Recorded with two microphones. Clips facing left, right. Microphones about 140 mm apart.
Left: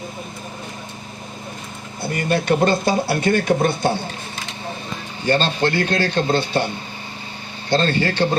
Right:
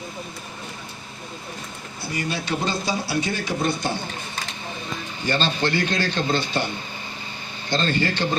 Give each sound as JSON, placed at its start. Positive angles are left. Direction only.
{"t": 2.0, "sound": "speech", "side_deg": 55}
{"t": 5.2, "sound": "speech", "side_deg": 55}
{"t": 7.7, "sound": "speech", "side_deg": 60}